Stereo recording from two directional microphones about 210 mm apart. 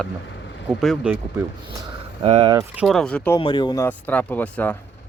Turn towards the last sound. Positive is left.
turn(degrees=5)  # may be behind; listen again after turning